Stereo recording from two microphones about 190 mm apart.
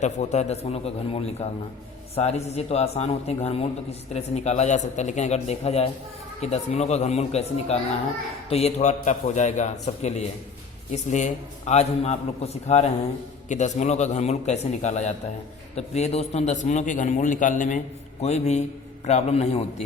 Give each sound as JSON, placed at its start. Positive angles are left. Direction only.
{"t": 0.0, "sound": "a man's voice", "side_deg": 35}